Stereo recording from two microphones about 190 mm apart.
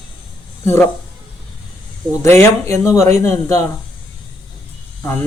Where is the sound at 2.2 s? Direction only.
15° left (ahead or behind).